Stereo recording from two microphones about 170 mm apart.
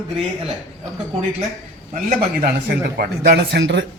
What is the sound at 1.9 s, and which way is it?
Speech, 55° right (ahead or behind).